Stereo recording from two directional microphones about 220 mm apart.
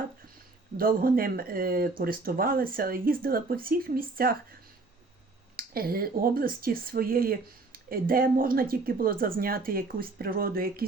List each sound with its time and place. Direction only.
0.8 s speech: 40° right (ahead or behind)
5.5 s speech: 40° right (ahead or behind)